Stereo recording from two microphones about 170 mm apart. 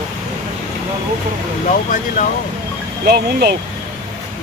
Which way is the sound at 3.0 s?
70° right (ahead or behind).